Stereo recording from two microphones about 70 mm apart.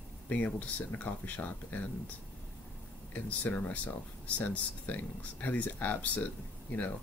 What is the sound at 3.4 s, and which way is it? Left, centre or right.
Speech, left.